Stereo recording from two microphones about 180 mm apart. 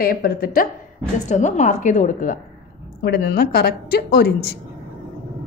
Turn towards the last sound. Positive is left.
turn(degrees=60)  # may be behind; listen again after turning